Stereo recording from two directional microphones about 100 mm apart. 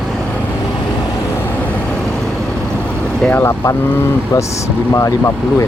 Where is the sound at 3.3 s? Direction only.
20° left (ahead or behind).